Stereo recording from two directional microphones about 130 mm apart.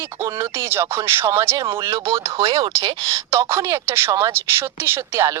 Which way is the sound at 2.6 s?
40° right (ahead or behind).